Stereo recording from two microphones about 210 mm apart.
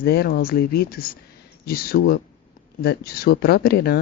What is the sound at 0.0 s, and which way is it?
Speech, 50° left (ahead or behind).